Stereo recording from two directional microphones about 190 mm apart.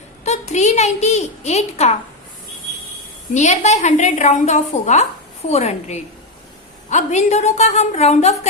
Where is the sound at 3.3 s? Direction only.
35° left (ahead or behind).